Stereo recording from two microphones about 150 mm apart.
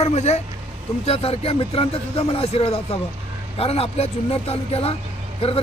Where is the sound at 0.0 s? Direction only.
45° left (ahead or behind).